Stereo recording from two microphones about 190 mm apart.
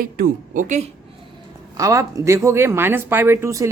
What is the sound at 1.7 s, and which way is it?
Speech, 15° right (ahead or behind).